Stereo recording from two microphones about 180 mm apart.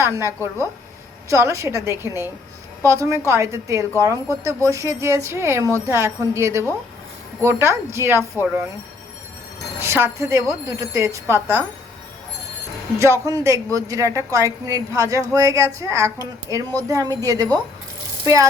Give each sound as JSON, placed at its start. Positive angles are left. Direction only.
{"t": 0.0, "sound": "a woman's voice", "side_deg": -15}
{"t": 1.3, "sound": "speech", "side_deg": -15}
{"t": 9.8, "sound": "speech", "side_deg": -15}
{"t": 13.0, "sound": "a woman's voice", "side_deg": -15}